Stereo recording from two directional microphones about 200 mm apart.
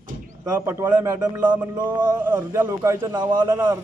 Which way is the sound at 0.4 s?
10° right (ahead or behind).